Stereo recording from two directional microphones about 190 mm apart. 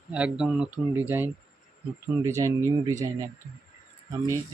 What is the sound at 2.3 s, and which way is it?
Speech, 15° right (ahead or behind).